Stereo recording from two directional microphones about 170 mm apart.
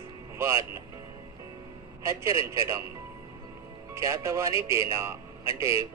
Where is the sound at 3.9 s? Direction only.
15° right (ahead or behind).